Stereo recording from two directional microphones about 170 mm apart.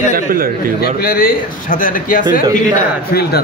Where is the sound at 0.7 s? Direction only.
65° left (ahead or behind).